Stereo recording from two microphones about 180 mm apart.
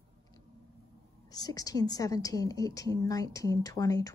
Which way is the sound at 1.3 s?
20° left (ahead or behind).